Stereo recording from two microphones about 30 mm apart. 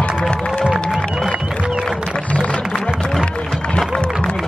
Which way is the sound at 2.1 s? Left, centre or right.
Left.